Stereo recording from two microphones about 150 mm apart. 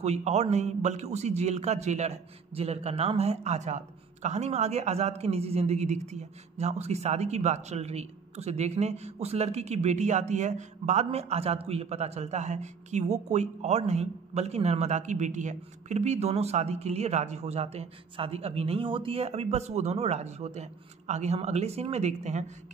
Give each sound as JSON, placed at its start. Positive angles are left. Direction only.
{"t": 0.0, "sound": "a man's voice", "side_deg": -45}